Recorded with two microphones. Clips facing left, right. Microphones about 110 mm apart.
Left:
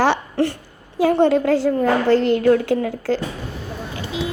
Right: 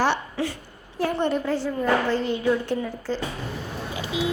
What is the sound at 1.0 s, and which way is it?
A woman's voice, 90° left.